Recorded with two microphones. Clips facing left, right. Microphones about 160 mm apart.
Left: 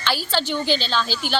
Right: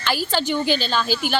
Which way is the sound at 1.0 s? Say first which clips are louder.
Right 5 dB; 50° right (ahead or behind).